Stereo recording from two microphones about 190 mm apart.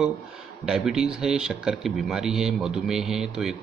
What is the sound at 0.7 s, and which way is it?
Speech, 5° right (ahead or behind).